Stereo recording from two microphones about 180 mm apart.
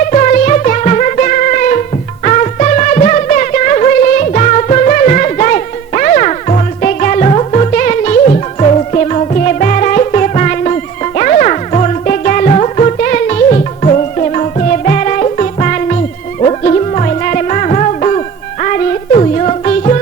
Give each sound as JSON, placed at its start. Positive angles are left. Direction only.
{"t": 0.1, "sound": "music", "side_deg": 45}